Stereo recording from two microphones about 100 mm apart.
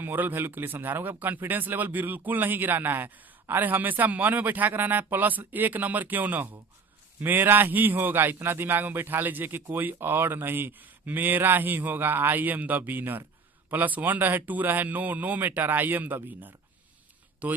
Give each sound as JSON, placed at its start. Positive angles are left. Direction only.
{"t": 0.0, "sound": "a man's voice", "side_deg": -20}